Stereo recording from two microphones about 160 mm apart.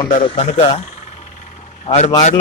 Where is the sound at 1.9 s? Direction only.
45° left (ahead or behind).